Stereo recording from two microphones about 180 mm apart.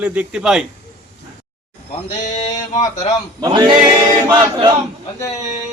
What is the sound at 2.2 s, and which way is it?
Sheep, 40° left (ahead or behind).